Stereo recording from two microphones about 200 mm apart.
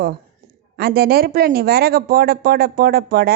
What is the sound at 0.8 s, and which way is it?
A woman's voice, 50° right (ahead or behind).